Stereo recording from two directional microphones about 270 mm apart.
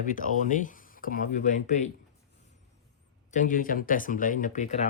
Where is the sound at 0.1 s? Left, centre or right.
Left.